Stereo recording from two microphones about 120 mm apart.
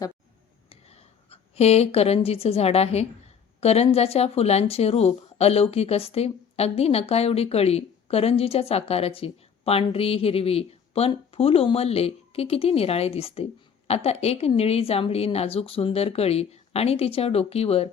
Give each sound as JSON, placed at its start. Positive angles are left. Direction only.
{"t": 0.7, "sound": "a woman's voice", "side_deg": 55}